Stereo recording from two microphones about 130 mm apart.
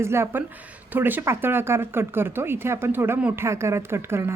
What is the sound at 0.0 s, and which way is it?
A woman's voice, 20° right (ahead or behind).